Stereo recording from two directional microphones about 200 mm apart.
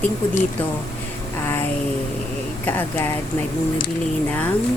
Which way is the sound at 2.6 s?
10° left (ahead or behind).